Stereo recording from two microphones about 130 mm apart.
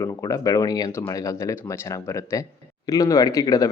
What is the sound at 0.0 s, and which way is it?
Speech, 25° left (ahead or behind).